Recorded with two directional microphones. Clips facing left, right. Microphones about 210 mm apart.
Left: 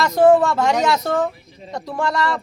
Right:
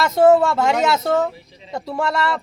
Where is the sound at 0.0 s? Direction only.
5° right (ahead or behind).